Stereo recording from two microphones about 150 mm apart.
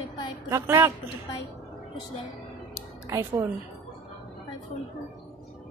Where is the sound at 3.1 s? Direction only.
20° right (ahead or behind).